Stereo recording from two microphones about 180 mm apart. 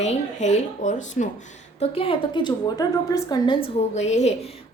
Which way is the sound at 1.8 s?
30° left (ahead or behind).